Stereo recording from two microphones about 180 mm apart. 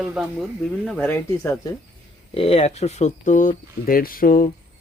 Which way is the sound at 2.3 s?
35° left (ahead or behind).